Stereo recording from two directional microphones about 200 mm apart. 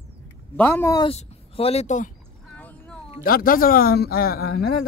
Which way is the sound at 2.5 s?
5° left (ahead or behind).